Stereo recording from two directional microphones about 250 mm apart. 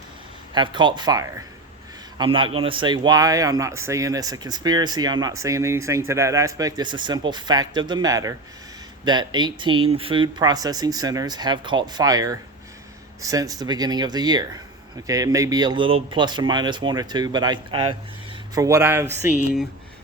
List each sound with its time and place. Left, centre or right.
0.5 s speech: centre